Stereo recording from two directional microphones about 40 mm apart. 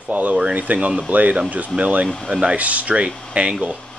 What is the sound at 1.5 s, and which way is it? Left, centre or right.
Speech, right.